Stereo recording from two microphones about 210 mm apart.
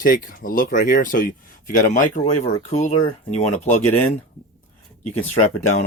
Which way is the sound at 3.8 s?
10° left (ahead or behind).